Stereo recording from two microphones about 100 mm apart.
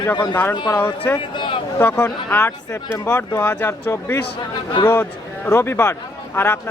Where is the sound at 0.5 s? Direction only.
45° left (ahead or behind).